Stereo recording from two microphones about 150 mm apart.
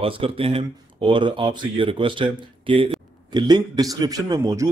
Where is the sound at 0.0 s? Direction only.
40° right (ahead or behind).